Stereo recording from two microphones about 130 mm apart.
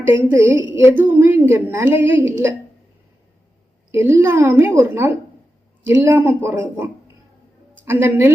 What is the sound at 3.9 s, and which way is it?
A woman's voice, 20° right (ahead or behind).